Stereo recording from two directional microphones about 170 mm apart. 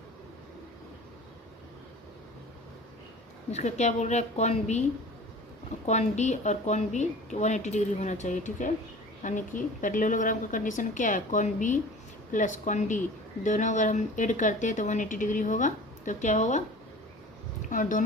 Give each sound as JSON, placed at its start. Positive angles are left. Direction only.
{"t": 3.5, "sound": "a woman's voice", "side_deg": 40}
{"t": 5.8, "sound": "a woman's voice", "side_deg": 45}
{"t": 17.7, "sound": "speech", "side_deg": 50}